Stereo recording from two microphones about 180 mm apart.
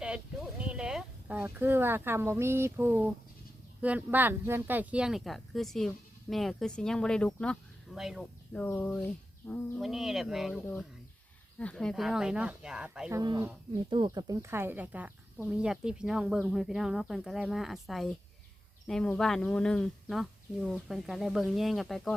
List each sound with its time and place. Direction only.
0.6 s speech: 5° right (ahead or behind)
8.5 s speech: 10° left (ahead or behind)
11.6 s speech: 5° left (ahead or behind)
13.1 s speech: 20° right (ahead or behind); by 22.1 s centre (ahead or behind)